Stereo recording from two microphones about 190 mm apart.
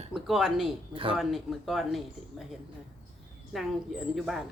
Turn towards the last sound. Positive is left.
turn(degrees=0)  # may be behind; listen again after turning